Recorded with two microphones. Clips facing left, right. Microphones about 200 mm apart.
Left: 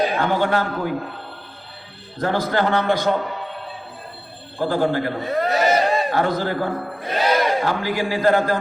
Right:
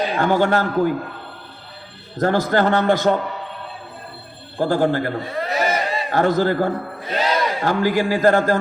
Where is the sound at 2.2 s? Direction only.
45° right (ahead or behind).